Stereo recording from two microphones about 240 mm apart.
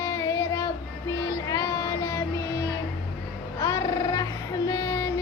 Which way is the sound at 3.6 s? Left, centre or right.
Centre.